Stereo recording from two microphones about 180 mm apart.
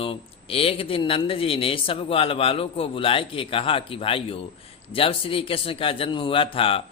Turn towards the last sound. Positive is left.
turn(degrees=30)  # may be behind; listen again after turning